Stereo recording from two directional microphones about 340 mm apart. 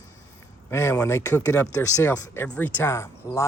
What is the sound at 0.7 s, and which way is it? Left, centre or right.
Speech, centre.